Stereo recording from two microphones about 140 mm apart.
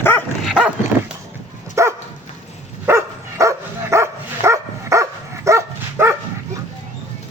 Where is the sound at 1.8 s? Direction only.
20° right (ahead or behind).